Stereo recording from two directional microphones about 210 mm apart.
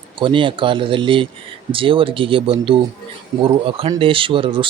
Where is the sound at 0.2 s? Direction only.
25° right (ahead or behind).